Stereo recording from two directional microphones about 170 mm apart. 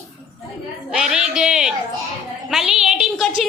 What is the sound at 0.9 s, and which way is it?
A child's voice, 5° right (ahead or behind).